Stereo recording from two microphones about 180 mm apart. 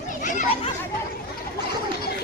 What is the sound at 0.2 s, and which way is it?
Chatter, 45° left (ahead or behind).